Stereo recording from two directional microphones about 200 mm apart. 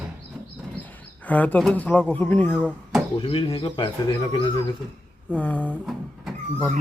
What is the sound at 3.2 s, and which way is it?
Speech, 25° left (ahead or behind).